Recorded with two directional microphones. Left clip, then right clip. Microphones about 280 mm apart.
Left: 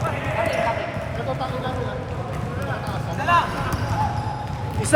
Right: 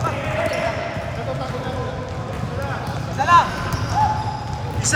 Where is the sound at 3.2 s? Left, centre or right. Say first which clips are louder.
Right 5 dB; centre.